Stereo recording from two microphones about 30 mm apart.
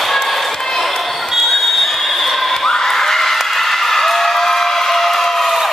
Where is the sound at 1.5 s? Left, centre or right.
Centre.